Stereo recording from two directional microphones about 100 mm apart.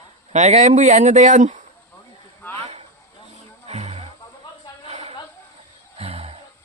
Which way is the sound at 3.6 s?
90° right.